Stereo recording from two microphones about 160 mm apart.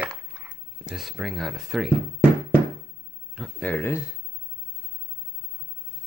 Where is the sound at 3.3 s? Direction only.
Centre (ahead or behind).